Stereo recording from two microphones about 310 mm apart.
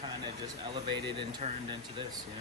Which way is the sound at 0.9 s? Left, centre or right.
Centre.